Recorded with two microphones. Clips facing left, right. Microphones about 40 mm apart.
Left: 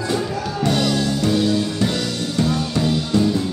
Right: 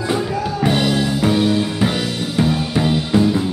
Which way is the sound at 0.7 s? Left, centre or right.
Right.